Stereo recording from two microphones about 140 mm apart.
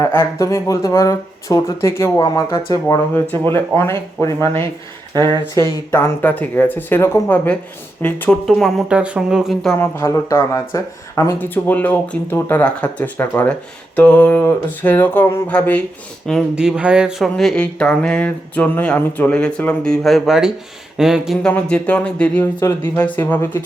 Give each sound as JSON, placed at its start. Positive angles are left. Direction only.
{"t": 0.0, "sound": "speech", "side_deg": 20}
{"t": 9.7, "sound": "speech", "side_deg": 20}
{"t": 16.6, "sound": "speech", "side_deg": -5}
{"t": 21.4, "sound": "speech", "side_deg": 10}